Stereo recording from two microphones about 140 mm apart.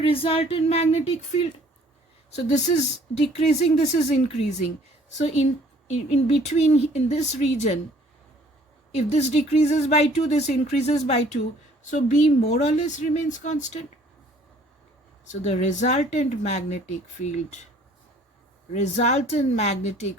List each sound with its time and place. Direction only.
0.0 s speech: 40° left (ahead or behind)
2.5 s speech: 55° left (ahead or behind)
9.0 s speech: 50° left (ahead or behind)
15.3 s speech: 55° left (ahead or behind)
18.7 s speech: 55° left (ahead or behind)